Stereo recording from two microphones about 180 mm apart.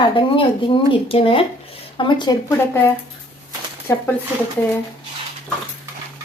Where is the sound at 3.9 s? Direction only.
15° left (ahead or behind).